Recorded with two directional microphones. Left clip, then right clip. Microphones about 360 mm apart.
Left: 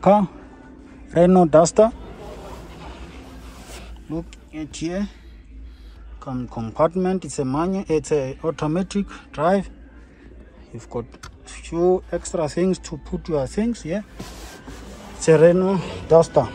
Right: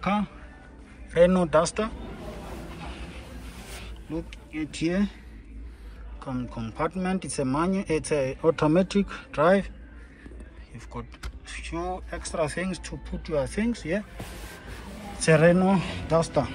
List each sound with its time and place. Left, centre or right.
0.0 s speech: centre
2.8 s a sound: centre
3.8 s speech: centre
6.2 s speech: centre
10.9 s speech: centre
15.1 s speech: centre